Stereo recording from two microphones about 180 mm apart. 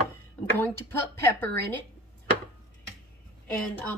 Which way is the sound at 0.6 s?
10° left (ahead or behind).